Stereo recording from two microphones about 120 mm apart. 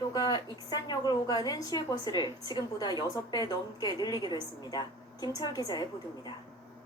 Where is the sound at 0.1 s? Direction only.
35° left (ahead or behind).